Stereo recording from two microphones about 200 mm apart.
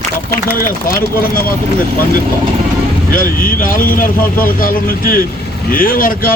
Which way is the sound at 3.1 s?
45° left (ahead or behind).